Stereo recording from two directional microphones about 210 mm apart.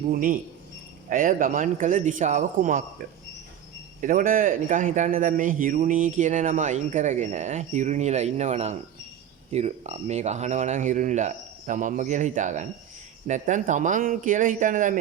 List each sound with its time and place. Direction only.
0.1 s speech: 40° right (ahead or behind)
4.0 s speech: 40° right (ahead or behind)